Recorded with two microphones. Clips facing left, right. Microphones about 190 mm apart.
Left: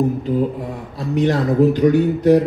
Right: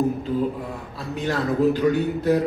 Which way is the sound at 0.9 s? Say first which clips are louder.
Left 8 dB; 20° left (ahead or behind).